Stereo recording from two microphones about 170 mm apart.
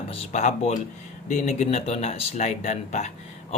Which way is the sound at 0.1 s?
40° left (ahead or behind).